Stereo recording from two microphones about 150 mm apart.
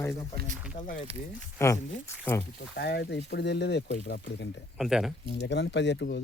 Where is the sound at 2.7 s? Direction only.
90° left.